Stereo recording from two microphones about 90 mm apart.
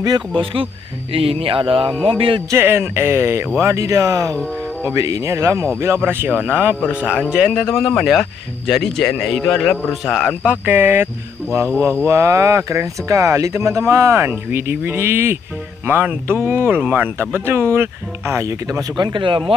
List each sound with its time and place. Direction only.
1.1 s speech: 90° right
2.5 s speech: 25° right (ahead or behind)
12.0 s speech: 35° right (ahead or behind)
18.9 s speech: 60° right (ahead or behind)